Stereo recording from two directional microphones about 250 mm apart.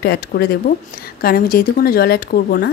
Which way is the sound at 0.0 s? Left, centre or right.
Left.